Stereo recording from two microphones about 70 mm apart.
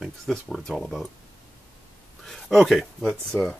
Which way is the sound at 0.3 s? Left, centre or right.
Centre.